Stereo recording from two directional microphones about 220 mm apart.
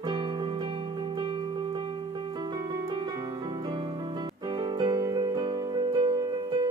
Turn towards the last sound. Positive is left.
turn(degrees=-20)  # may be behind; listen again after turning